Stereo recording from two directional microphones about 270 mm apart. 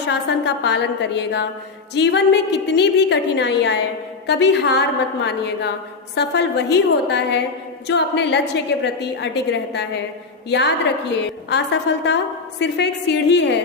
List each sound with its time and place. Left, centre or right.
0.1 s a woman's voice: left